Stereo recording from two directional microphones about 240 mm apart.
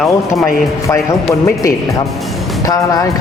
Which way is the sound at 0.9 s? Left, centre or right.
Centre.